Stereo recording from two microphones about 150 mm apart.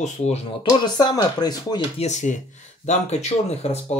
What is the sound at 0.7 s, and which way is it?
Speech, 30° left (ahead or behind).